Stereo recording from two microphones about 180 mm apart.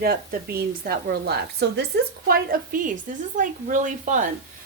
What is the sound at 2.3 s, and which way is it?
A woman's voice, 50° right (ahead or behind).